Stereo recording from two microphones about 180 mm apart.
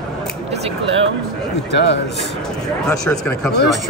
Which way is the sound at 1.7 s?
70° left (ahead or behind).